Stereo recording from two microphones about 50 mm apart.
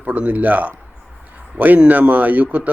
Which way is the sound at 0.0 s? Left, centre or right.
Right.